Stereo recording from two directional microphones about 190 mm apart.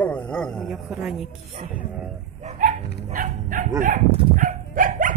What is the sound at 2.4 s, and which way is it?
Dog, 45° right (ahead or behind).